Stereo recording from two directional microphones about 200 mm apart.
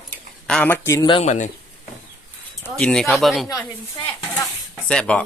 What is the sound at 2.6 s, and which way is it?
Speech, 5° left (ahead or behind).